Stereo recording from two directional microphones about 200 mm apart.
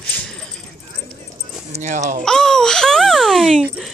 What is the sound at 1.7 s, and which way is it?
Speech, 35° right (ahead or behind).